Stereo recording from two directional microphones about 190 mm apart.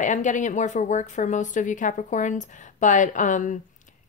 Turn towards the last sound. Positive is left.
turn(degrees=40)  # may be behind; listen again after turning